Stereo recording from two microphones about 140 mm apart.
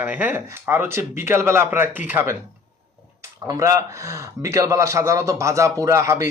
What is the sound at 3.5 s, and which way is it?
Speech, 25° right (ahead or behind).